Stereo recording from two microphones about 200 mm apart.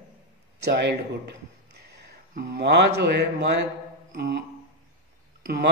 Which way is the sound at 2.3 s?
55° right (ahead or behind).